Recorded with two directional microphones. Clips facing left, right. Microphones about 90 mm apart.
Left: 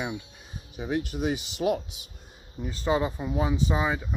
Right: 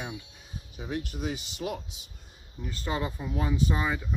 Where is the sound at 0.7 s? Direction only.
75° left (ahead or behind).